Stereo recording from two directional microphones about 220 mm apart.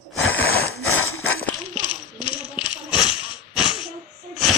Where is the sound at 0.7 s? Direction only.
70° left (ahead or behind).